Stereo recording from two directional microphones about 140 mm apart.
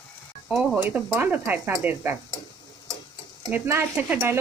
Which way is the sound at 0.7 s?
15° right (ahead or behind).